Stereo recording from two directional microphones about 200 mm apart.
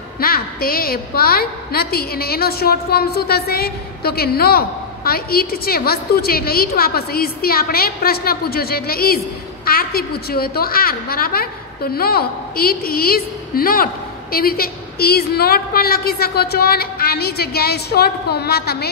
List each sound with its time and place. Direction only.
0.2 s a woman's voice: 50° left (ahead or behind)